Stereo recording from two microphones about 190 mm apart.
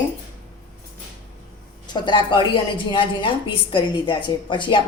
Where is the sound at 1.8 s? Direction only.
25° left (ahead or behind).